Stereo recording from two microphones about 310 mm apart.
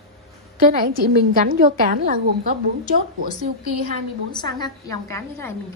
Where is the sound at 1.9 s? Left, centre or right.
Right.